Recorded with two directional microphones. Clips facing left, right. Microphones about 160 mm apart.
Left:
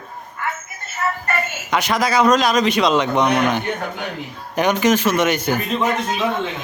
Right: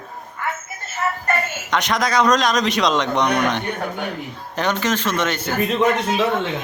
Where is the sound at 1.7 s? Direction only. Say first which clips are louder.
Left 1 dB; 5° left (ahead or behind).